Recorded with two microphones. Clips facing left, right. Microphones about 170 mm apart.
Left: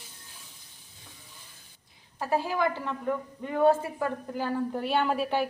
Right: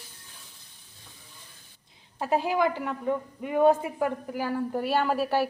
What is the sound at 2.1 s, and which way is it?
A woman's voice, 20° right (ahead or behind).